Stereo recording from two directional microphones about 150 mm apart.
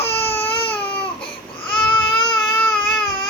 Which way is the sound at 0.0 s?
40° left (ahead or behind).